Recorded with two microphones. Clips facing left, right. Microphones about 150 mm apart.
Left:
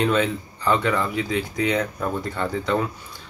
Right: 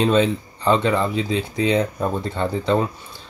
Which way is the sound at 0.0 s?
25° right (ahead or behind).